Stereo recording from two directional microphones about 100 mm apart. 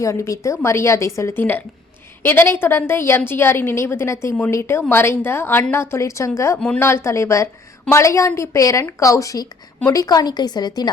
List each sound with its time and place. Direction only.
0.0 s a woman's voice: 30° left (ahead or behind)